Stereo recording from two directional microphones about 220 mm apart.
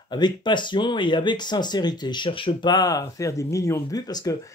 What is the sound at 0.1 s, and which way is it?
Speech, 20° left (ahead or behind).